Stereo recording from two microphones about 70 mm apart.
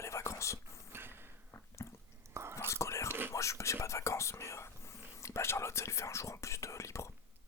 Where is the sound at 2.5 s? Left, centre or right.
Left.